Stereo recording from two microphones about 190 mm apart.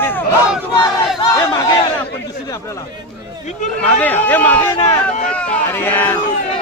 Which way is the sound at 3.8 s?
10° left (ahead or behind).